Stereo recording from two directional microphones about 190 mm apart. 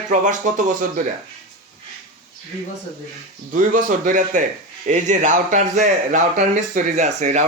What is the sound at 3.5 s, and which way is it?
A man's voice, 45° right (ahead or behind).